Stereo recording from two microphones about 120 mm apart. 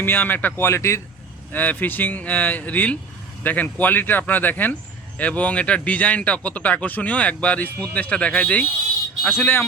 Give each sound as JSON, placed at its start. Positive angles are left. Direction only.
{"t": 0.0, "sound": "speech", "side_deg": 15}